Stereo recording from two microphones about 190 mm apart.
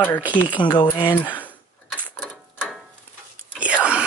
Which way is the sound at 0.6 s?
25° left (ahead or behind).